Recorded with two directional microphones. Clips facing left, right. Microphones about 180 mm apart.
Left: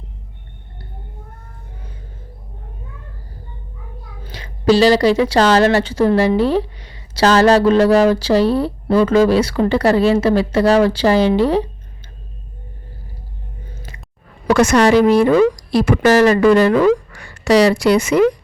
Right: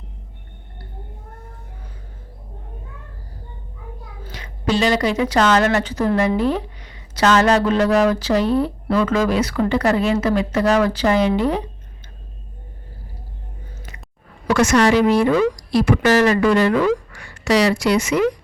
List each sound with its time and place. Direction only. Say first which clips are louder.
4.3 s speech: left 7 dB; 35° left (ahead or behind)
14.4 s speech: left 3 dB; 35° left (ahead or behind)